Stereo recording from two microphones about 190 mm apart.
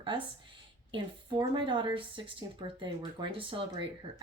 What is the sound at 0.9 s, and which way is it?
Speech, 25° right (ahead or behind).